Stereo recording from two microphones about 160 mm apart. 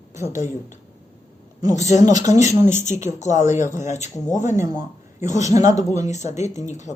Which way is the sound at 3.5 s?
15° right (ahead or behind).